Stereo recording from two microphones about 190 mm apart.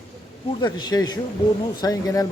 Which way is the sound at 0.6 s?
20° left (ahead or behind).